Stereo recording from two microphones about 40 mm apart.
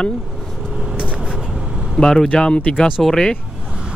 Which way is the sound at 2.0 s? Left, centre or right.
Centre.